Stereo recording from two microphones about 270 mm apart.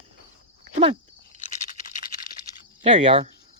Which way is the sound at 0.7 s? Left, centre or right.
Right.